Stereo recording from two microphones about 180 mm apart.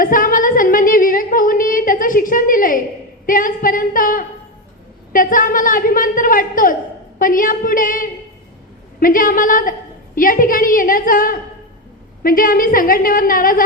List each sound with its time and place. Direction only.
0.0 s female singing: 50° left (ahead or behind)
3.2 s a woman's voice: 50° left (ahead or behind)